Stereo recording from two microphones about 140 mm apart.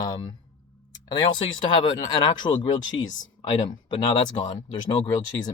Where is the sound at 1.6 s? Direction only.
30° left (ahead or behind).